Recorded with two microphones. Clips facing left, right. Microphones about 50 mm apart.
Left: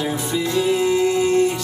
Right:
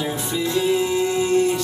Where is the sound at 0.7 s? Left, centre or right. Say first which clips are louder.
Left 2 dB; left.